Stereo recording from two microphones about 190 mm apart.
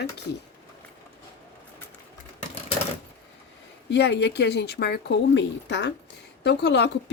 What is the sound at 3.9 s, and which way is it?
A woman's voice, 60° left (ahead or behind).